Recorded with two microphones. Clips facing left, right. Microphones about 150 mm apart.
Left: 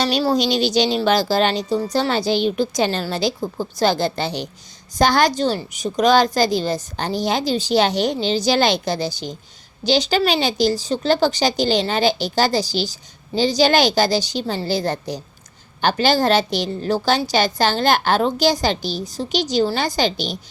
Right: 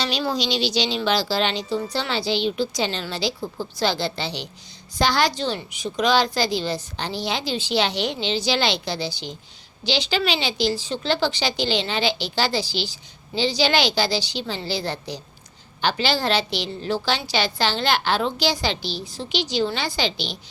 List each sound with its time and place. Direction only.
0.0 s a woman's voice: 40° left (ahead or behind)